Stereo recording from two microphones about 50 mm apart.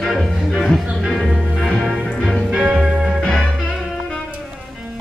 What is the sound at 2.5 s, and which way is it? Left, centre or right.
Music, right.